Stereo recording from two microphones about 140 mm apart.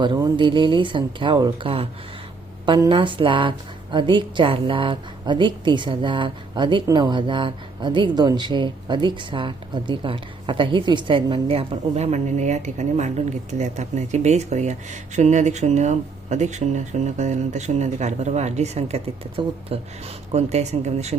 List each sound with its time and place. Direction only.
0.0 s a woman's voice: 35° right (ahead or behind)
2.9 s a woman's voice: 35° right (ahead or behind); by 21.2 s 55° right (ahead or behind)